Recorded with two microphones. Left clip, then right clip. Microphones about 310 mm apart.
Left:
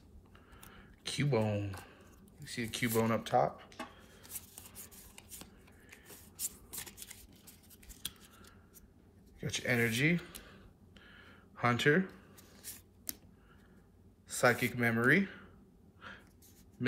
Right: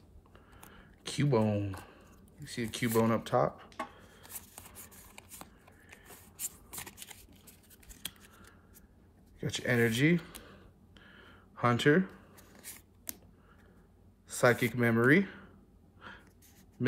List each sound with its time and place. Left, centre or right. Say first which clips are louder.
0.7 s speech: right 1 dB; centre
8.0 s scissors: right 1 dB; centre
9.4 s speech: right 3 dB; centre
11.1 s a sound: right 1 dB; centre
14.5 s speech: right 3 dB; centre